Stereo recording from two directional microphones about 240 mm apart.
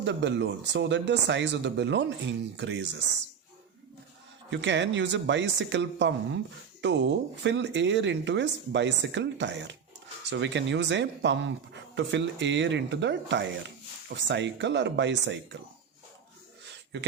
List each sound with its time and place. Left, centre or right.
0.0 s speech: right
4.5 s speech: right
16.9 s speech: right